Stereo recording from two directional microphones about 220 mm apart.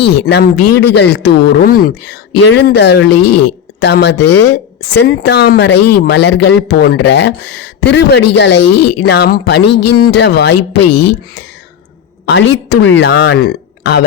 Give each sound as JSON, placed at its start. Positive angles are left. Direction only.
{"t": 0.0, "sound": "speech", "side_deg": 50}
{"t": 10.8, "sound": "speech", "side_deg": 90}
{"t": 12.3, "sound": "speech", "side_deg": 55}